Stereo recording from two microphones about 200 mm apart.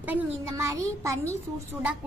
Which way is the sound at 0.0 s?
10° right (ahead or behind).